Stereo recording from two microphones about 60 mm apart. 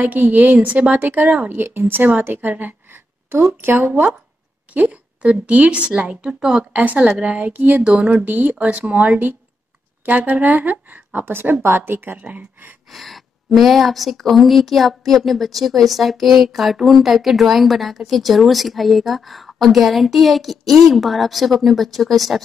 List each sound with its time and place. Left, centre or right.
0.0 s speech: right
1.6 s a woman's voice: right
4.7 s speech: right
6.8 s a woman's voice: right
12.2 s speech: right
12.9 s a woman's voice: centre